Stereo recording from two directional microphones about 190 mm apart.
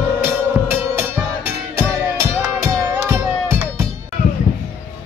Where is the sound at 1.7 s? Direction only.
15° right (ahead or behind).